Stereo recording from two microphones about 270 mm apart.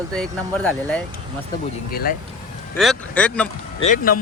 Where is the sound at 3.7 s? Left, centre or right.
Left.